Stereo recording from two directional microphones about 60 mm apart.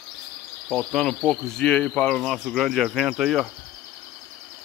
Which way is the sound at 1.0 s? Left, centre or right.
Centre.